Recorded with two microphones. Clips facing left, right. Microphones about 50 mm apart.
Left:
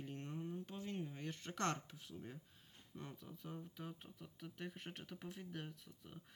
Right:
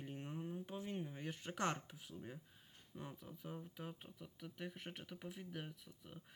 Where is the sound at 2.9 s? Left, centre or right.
Centre.